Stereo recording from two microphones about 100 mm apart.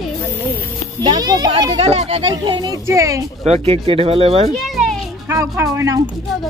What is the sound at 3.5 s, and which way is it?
Speech, 70° right (ahead or behind).